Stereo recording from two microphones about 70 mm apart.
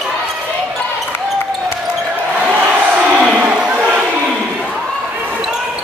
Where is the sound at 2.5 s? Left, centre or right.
Centre.